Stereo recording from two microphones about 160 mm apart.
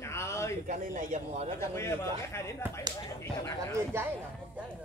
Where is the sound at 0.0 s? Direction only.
15° left (ahead or behind).